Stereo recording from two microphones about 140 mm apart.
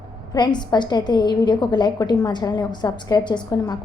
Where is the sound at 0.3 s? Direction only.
30° left (ahead or behind).